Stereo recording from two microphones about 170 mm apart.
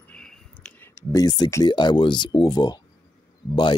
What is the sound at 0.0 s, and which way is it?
Speech, 5° left (ahead or behind).